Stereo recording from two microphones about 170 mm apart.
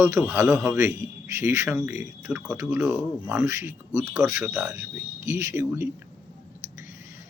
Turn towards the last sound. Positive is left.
turn(degrees=-15)  # may be behind; listen again after turning